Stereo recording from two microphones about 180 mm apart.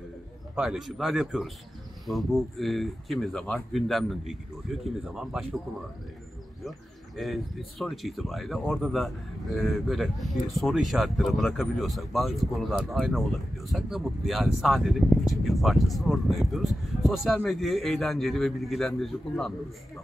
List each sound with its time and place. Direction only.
0.6 s speech: centre (ahead or behind)
7.2 s speech: centre (ahead or behind)